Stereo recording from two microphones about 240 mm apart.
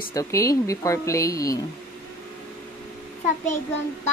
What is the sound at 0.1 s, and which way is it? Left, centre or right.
Speech, centre.